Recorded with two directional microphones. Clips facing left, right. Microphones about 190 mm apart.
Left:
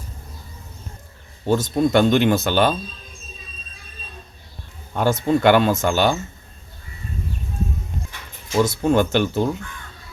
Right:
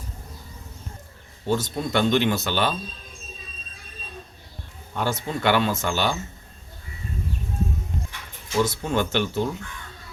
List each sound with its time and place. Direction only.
1.5 s speech: 45° left (ahead or behind)
4.9 s speech: 45° left (ahead or behind)
8.6 s speech: 45° left (ahead or behind)